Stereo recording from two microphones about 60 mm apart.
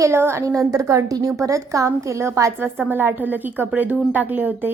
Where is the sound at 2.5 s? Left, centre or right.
Right.